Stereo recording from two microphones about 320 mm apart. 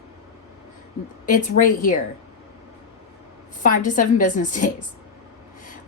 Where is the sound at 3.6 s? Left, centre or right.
Left.